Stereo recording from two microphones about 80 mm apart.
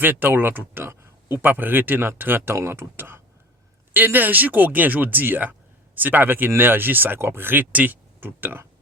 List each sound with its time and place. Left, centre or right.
0.0 s speech: right